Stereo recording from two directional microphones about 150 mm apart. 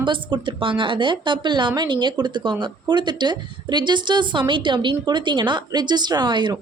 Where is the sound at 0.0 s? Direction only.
30° right (ahead or behind).